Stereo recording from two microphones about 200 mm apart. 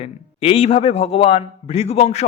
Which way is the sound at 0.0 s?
30° left (ahead or behind).